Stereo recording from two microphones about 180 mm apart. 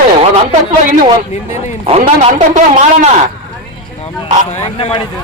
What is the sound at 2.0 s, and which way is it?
A man's voice, 45° right (ahead or behind).